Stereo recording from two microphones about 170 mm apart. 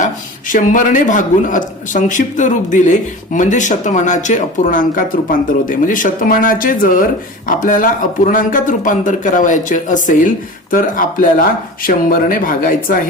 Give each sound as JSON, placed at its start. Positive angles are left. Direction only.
{"t": 0.0, "sound": "a man's voice", "side_deg": 50}